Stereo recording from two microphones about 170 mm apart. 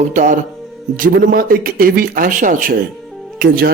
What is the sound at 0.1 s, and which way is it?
A man's voice, 45° right (ahead or behind).